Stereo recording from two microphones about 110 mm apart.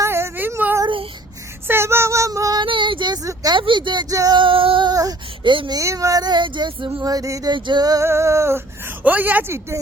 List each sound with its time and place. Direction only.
0.0 s a sound: 25° right (ahead or behind)
1.6 s child singing: 20° right (ahead or behind)
2.6 s child singing: 50° right (ahead or behind)
3.2 s speech: 35° right (ahead or behind)
3.6 s speech: 45° right (ahead or behind)
4.1 s speech: 35° right (ahead or behind)
4.4 s female singing: 55° right (ahead or behind)
4.9 s a sound: 35° right (ahead or behind)
5.7 s speech: 30° right (ahead or behind); by 6.9 s 50° right (ahead or behind)
7.0 s speech: 35° right (ahead or behind)
8.0 s speech: 25° right (ahead or behind)
9.0 s speech: 15° right (ahead or behind)